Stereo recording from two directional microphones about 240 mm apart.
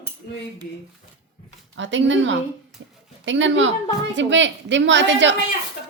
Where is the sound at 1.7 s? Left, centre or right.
Right.